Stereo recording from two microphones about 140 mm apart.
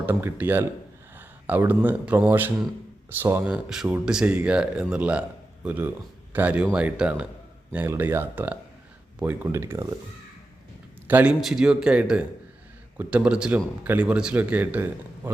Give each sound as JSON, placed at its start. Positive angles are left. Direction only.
{"t": 0.0, "sound": "a man's voice", "side_deg": -15}
{"t": 11.1, "sound": "speech", "side_deg": -10}